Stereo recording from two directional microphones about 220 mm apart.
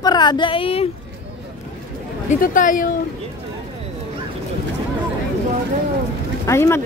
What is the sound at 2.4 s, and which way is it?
Speech, 35° left (ahead or behind).